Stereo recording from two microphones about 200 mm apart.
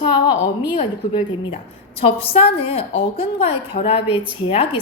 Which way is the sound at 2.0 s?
25° left (ahead or behind).